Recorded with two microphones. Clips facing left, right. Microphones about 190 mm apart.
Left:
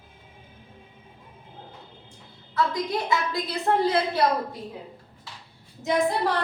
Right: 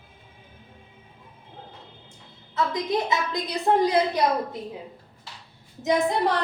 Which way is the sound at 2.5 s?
20° right (ahead or behind).